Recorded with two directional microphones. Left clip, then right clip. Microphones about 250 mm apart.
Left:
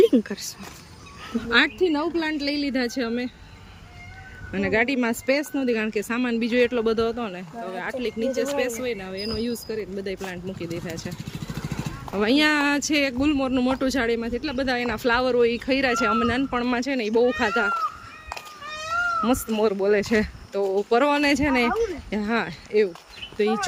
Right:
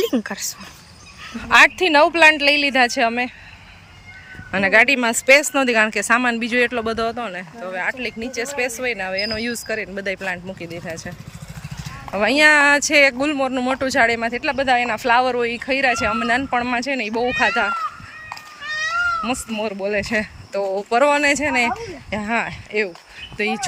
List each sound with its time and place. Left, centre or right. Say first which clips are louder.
0.0 s speech: left 3 dB; centre
4.5 s speech: right 8 dB; centre
12.1 s speech: right 7 dB; centre
18.6 s cat: right 8 dB; left
19.2 s speech: left 2 dB; centre